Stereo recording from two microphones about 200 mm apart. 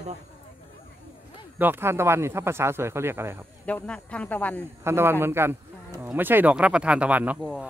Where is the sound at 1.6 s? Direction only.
10° right (ahead or behind).